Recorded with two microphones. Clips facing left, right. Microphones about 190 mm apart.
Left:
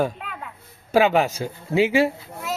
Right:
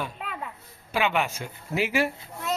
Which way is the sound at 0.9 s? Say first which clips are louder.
Left 8 dB; 40° left (ahead or behind).